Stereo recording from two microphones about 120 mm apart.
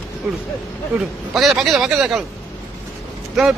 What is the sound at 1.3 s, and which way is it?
Speech, centre (ahead or behind).